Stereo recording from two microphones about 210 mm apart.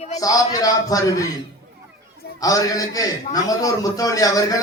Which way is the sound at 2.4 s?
15° left (ahead or behind).